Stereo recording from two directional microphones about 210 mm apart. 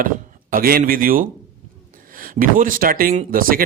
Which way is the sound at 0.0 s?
40° right (ahead or behind).